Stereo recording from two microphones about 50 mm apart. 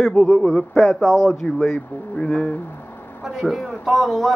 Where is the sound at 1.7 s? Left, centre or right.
Left.